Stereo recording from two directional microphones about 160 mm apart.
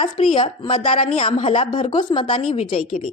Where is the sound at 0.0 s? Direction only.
30° left (ahead or behind).